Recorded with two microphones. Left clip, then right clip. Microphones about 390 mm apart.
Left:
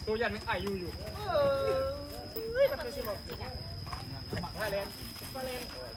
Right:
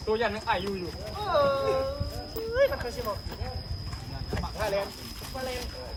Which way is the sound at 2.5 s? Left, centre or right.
Centre.